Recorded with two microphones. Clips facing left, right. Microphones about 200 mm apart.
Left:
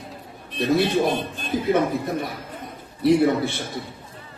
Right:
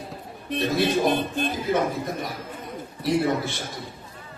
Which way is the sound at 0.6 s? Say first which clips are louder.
Left 4 dB; 60° left (ahead or behind).